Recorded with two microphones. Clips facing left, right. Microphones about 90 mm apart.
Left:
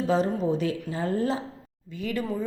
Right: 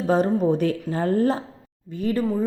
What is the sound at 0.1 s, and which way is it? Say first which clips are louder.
A woman's voice: right 6 dB; 55° right (ahead or behind).